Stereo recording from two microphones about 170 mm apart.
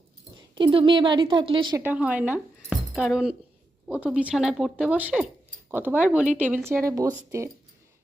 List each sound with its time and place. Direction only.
0.5 s a woman's voice: 30° right (ahead or behind)
1.8 s speech: 10° right (ahead or behind)